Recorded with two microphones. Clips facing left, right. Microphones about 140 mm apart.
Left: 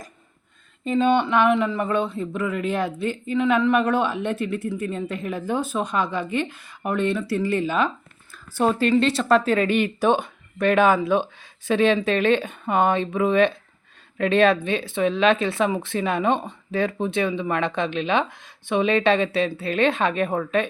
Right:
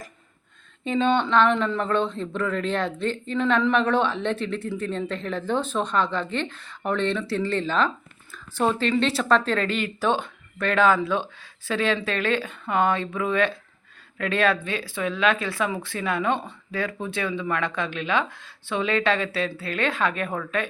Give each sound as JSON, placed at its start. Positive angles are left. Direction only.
{"t": 0.9, "sound": "speech", "side_deg": 5}